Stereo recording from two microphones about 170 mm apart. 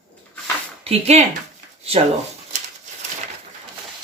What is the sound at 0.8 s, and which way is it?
Speech, 40° right (ahead or behind).